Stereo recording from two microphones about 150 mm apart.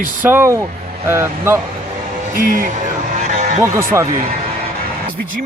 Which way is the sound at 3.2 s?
50° right (ahead or behind).